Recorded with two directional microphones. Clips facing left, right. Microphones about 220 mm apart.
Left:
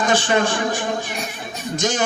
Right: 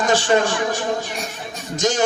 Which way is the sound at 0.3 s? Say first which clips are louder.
Right 1 dB; 40° right (ahead or behind).